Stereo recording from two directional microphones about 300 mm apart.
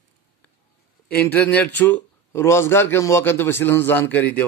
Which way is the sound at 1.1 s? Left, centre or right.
Centre.